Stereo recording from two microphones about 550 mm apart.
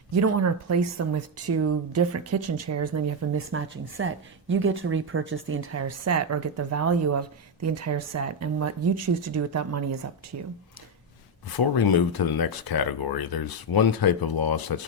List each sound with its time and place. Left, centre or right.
0.1 s speech: right
11.5 s speech: left